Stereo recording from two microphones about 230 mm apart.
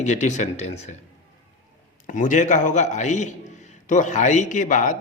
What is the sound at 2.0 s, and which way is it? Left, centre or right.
A man's voice, left.